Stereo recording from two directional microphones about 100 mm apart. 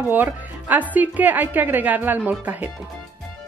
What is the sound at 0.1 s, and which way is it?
Speech, 15° right (ahead or behind).